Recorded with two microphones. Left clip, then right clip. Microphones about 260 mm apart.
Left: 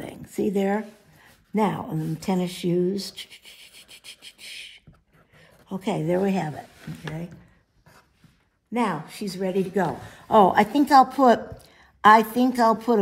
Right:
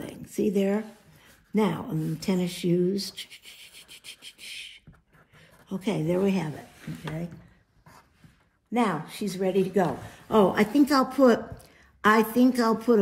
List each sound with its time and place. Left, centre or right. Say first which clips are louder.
0.4 s speech: left 2 dB; left
3.4 s a sound: left 1 dB; left
5.7 s speech: left 3 dB; left
8.7 s speech: left 1 dB; left
10.7 s a woman's voice: left 6 dB; centre